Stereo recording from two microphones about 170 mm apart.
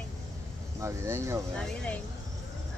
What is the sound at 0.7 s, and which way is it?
Speech, 15° right (ahead or behind).